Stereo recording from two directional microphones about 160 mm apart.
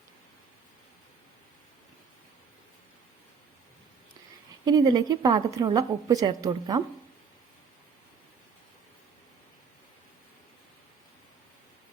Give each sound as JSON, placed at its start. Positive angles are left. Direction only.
{"t": 4.6, "sound": "a woman's voice", "side_deg": -25}